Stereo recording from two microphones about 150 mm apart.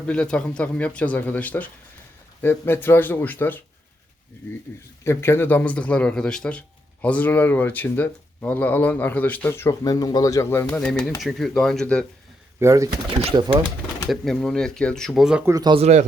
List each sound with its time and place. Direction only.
0.0 s a man's voice: 5° left (ahead or behind)
5.0 s a man's voice: 15° left (ahead or behind)
12.5 s speech: 20° right (ahead or behind)
13.3 s speech: 35° right (ahead or behind)
14.1 s speech: 5° left (ahead or behind)
15.4 s speech: 25° right (ahead or behind)
15.7 s speech: 45° right (ahead or behind)